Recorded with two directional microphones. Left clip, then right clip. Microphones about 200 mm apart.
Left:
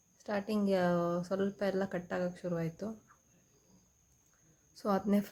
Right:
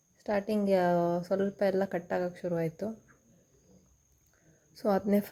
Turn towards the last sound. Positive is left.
turn(degrees=-15)  # may be behind; listen again after turning